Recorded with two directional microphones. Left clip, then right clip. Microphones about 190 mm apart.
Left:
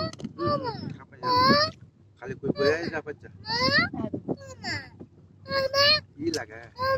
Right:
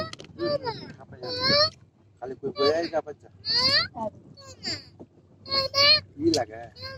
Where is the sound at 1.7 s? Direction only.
40° right (ahead or behind).